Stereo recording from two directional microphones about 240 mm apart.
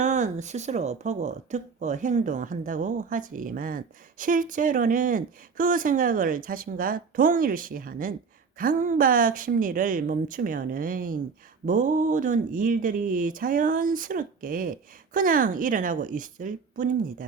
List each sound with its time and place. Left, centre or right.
0.0 s speech: right